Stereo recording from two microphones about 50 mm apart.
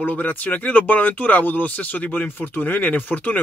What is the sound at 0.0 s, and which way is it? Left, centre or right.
Speech, left.